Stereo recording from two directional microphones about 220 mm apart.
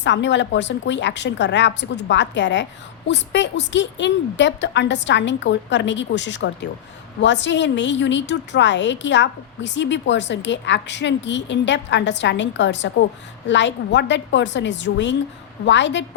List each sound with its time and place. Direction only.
0.0 s a woman's voice: 55° left (ahead or behind)